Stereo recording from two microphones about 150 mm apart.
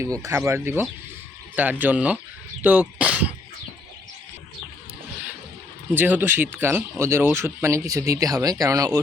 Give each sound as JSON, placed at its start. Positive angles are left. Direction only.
{"t": 0.0, "sound": "speech", "side_deg": -20}
{"t": 5.9, "sound": "speech", "side_deg": -10}